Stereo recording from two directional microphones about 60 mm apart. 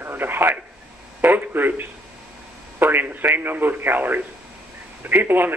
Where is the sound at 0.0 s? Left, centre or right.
Right.